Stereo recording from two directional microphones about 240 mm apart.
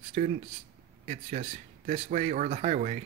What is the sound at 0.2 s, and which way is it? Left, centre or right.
Speech, right.